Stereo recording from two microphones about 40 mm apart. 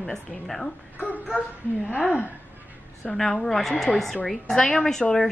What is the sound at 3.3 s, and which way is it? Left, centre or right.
Speech, centre.